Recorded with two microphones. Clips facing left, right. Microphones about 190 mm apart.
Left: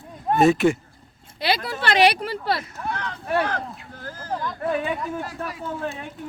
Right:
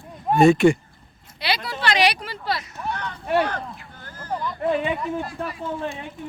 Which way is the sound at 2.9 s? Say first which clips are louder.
Right 2 dB; 90° left.